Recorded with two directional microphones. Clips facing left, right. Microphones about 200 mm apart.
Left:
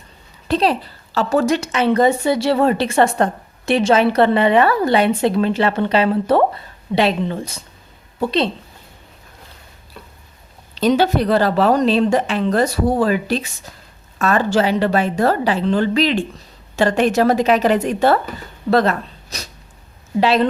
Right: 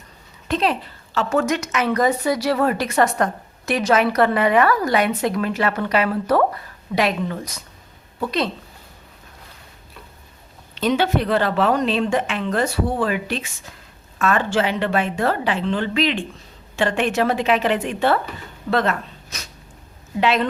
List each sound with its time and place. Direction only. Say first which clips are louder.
0.4 s a woman's voice: left 4 dB; 35° left (ahead or behind)
10.8 s a woman's voice: left 4 dB; 35° left (ahead or behind)